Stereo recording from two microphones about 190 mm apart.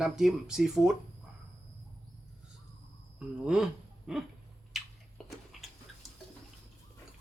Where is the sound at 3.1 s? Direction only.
5° right (ahead or behind).